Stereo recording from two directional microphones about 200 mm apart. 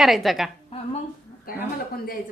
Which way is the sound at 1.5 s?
45° left (ahead or behind).